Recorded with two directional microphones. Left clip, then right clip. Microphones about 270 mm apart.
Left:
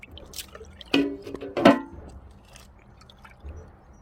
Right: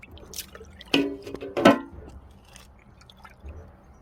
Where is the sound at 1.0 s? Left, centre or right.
Right.